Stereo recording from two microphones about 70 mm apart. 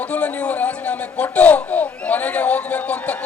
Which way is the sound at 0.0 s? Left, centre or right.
Centre.